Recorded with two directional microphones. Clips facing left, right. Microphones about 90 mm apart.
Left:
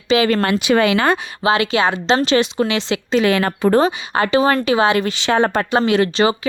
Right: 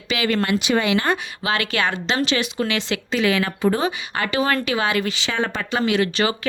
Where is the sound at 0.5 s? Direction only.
80° left.